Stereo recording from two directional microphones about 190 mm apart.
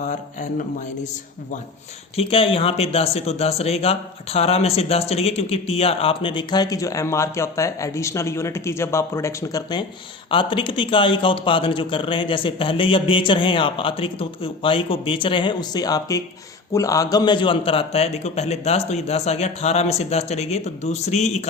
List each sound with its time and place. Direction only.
2.1 s a man's voice: 30° left (ahead or behind)